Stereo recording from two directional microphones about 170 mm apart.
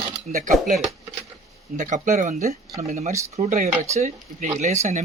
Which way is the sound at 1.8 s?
50° right (ahead or behind).